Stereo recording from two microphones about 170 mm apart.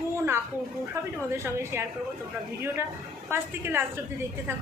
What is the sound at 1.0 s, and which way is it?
Speech, 15° right (ahead or behind).